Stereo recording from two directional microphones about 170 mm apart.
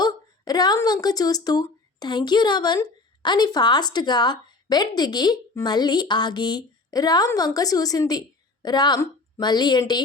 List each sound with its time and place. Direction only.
0.0 s a woman's voice: 25° left (ahead or behind)